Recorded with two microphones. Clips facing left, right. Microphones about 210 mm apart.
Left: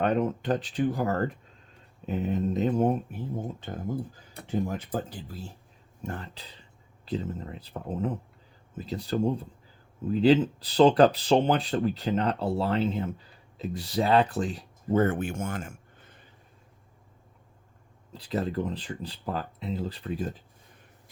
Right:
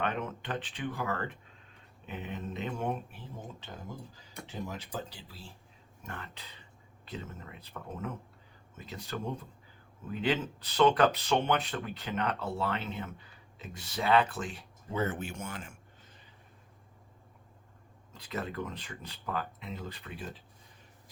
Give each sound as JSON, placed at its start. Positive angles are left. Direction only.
{"t": 0.0, "sound": "speech", "side_deg": 40}
{"t": 6.0, "sound": "speech", "side_deg": 35}
{"t": 18.1, "sound": "speech", "side_deg": 35}